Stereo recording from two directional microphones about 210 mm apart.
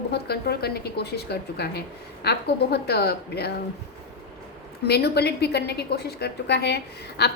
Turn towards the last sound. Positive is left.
turn(degrees=50)  # may be behind; listen again after turning